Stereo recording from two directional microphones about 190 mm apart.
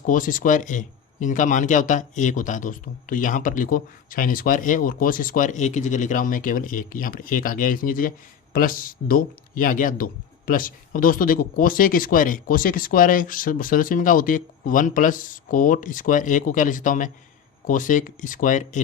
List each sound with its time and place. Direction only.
0.0 s speech: 45° left (ahead or behind)